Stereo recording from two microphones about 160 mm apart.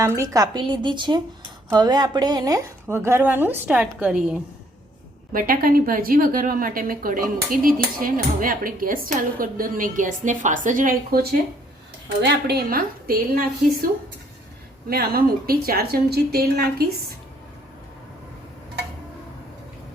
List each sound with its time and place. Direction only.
0.0 s a woman's voice: 20° right (ahead or behind)
5.3 s a woman's voice: 60° right (ahead or behind)
12.2 s a woman's voice: 90° right; by 13.2 s 65° right (ahead or behind)
14.8 s a woman's voice: 70° right (ahead or behind)